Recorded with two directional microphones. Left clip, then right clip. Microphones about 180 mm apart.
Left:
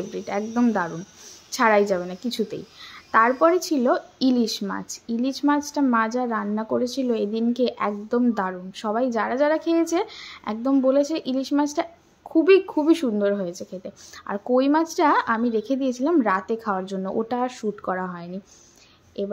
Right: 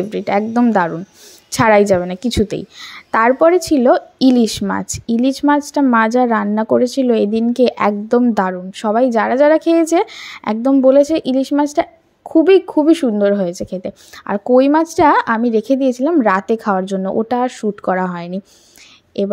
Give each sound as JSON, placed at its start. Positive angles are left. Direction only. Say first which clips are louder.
{"t": 0.1, "sound": "a woman's voice", "louder": "right 11 dB", "side_deg": -45}